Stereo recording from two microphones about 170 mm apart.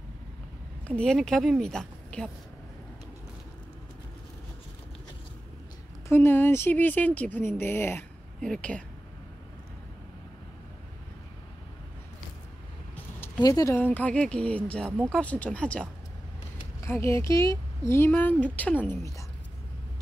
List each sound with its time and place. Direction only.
0.8 s speech: 5° left (ahead or behind)
6.0 s speech: 15° left (ahead or behind)
13.4 s speech: 20° left (ahead or behind)
14.9 s speech: 15° right (ahead or behind)
15.1 s speech: 10° left (ahead or behind)